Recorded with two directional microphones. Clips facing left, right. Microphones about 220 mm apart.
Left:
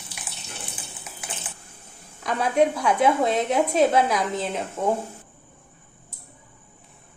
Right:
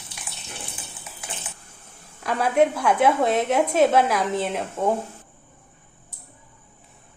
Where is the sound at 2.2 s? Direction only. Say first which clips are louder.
Right 1 dB; 5° right (ahead or behind).